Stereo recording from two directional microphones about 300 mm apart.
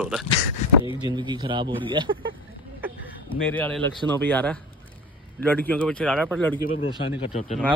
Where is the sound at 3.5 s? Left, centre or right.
Centre.